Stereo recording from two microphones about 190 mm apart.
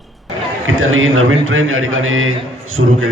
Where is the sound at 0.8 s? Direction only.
90° right.